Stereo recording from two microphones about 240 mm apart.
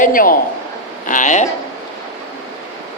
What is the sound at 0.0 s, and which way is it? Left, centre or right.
A man's voice, left.